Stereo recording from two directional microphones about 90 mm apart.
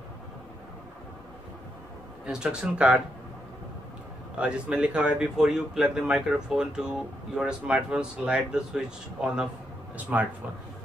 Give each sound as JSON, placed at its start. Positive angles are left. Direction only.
{"t": 2.2, "sound": "speech", "side_deg": -10}
{"t": 4.4, "sound": "speech", "side_deg": -10}